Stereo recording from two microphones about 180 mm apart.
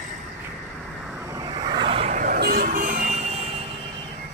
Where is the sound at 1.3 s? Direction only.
25° right (ahead or behind); by 3.4 s 40° right (ahead or behind).